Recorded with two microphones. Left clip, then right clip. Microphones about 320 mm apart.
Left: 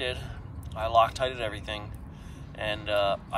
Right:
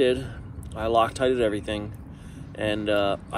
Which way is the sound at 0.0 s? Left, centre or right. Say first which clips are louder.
Right 10 dB; centre.